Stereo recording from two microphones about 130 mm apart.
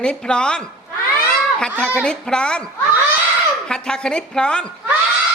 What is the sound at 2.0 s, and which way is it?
Speech, 5° left (ahead or behind).